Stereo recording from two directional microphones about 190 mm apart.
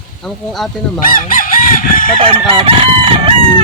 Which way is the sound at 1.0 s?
45° left (ahead or behind).